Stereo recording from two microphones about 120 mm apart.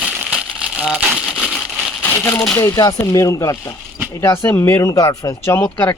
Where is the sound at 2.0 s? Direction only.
20° left (ahead or behind).